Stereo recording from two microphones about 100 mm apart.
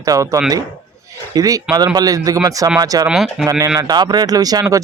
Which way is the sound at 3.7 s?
40° right (ahead or behind).